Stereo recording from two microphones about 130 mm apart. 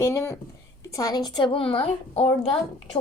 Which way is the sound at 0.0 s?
20° left (ahead or behind).